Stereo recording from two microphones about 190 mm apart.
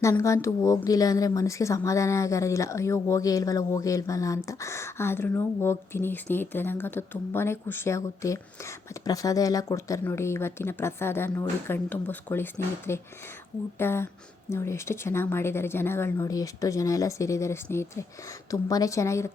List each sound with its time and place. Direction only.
0.0 s a woman's voice: 15° left (ahead or behind)